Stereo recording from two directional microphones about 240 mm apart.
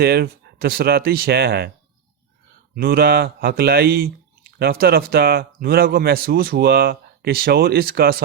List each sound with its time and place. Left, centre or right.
0.0 s speech: right
2.7 s speech: right